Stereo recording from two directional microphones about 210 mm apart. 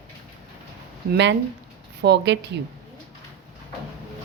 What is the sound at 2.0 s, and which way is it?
Speech, 55° right (ahead or behind).